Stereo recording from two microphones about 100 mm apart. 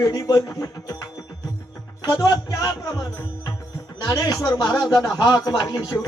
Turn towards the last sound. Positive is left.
turn(degrees=40)  # may be behind; listen again after turning